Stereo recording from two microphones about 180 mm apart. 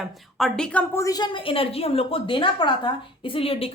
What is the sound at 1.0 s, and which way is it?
A woman's voice, 25° left (ahead or behind).